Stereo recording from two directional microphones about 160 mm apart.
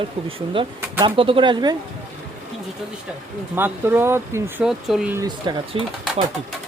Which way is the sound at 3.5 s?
15° right (ahead or behind).